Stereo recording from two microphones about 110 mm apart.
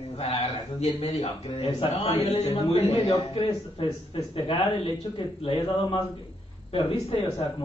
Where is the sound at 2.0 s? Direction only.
70° left (ahead or behind).